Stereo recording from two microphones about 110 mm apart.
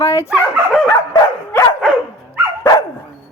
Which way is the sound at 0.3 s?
5° right (ahead or behind).